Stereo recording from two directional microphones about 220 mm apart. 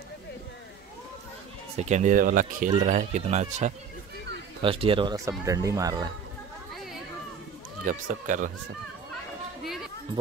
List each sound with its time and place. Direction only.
1.8 s speech: 30° right (ahead or behind); by 6.0 s 15° right (ahead or behind)
6.7 s a sound: centre (ahead or behind)
7.8 s speech: 35° right (ahead or behind)